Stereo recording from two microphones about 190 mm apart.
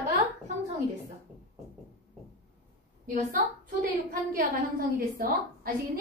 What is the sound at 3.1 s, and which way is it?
A woman's voice, 45° right (ahead or behind).